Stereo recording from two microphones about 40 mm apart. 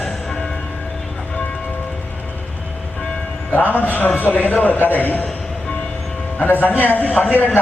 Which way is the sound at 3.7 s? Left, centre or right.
Left.